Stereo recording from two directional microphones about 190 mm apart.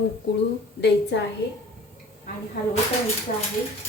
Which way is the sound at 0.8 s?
65° left (ahead or behind).